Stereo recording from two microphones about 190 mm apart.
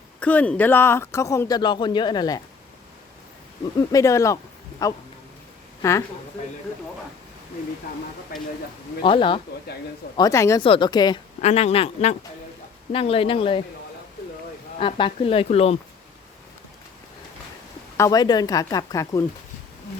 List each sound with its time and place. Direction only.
0.2 s speech: 5° left (ahead or behind)
3.9 s speech: 15° left (ahead or behind)
5.8 s speech: 15° left (ahead or behind)
8.3 s speech: 50° left (ahead or behind)
9.0 s speech: 25° left (ahead or behind)
11.3 s speech: 35° left (ahead or behind)
14.8 s speech: 25° left (ahead or behind)
17.9 s speech: 20° left (ahead or behind)